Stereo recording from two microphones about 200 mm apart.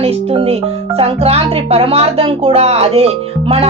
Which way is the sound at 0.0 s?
30° right (ahead or behind).